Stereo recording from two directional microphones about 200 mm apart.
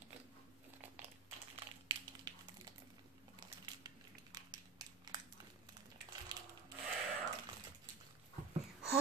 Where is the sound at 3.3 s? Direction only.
20° right (ahead or behind).